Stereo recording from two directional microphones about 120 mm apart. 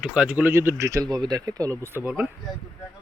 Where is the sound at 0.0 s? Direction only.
5° right (ahead or behind); by 2.0 s 25° right (ahead or behind).